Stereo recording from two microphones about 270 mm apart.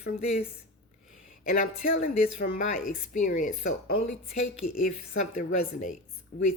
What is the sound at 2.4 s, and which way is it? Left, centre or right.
Speech, left.